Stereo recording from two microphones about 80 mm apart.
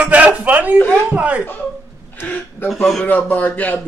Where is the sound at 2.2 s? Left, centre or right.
Left.